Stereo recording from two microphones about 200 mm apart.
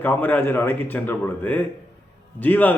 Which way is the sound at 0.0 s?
10° left (ahead or behind).